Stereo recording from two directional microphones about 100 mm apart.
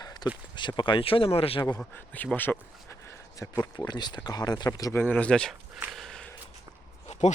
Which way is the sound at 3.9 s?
45° left (ahead or behind).